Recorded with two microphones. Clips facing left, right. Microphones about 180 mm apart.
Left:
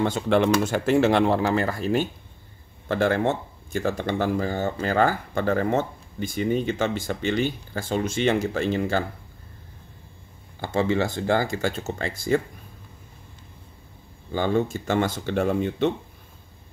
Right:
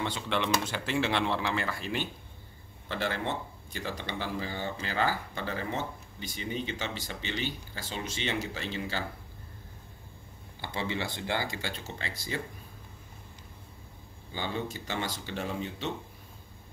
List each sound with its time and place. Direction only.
0.0 s speech: 45° left (ahead or behind)
10.6 s speech: 45° left (ahead or behind)
14.3 s speech: 50° left (ahead or behind)